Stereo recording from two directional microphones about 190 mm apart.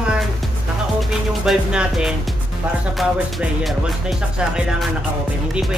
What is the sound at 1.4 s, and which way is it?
Music, 5° right (ahead or behind).